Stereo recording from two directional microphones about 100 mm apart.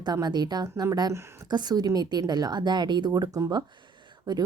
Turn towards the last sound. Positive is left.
turn(degrees=-45)  # may be behind; listen again after turning